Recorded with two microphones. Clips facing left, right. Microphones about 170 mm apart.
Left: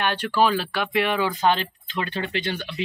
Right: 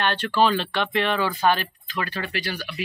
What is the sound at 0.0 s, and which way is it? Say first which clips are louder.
Speech: even; 10° left (ahead or behind).